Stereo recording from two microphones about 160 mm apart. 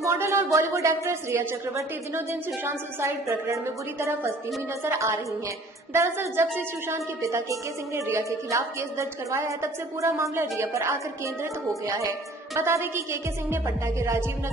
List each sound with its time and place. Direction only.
0.0 s a woman's voice: 15° right (ahead or behind)